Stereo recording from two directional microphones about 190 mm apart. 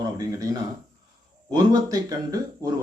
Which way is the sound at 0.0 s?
20° right (ahead or behind).